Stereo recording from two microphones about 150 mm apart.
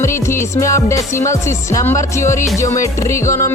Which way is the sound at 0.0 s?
20° left (ahead or behind).